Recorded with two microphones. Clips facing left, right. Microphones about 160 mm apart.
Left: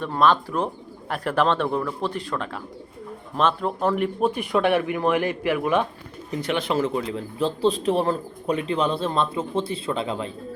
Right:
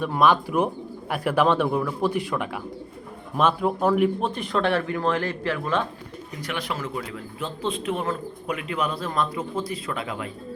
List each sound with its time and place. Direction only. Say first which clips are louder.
0.0 s a man's voice: even; 10° right (ahead or behind)
4.3 s a man's voice: left 3 dB; 10° left (ahead or behind); by 10.3 s 25° left (ahead or behind)